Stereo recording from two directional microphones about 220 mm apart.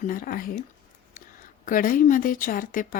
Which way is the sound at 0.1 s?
40° left (ahead or behind).